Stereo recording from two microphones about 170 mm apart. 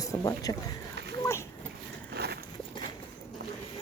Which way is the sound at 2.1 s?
70° right (ahead or behind).